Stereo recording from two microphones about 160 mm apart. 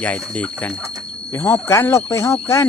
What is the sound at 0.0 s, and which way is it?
Speech, 10° left (ahead or behind).